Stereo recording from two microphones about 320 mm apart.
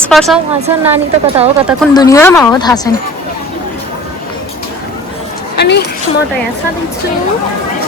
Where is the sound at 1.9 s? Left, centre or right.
Centre.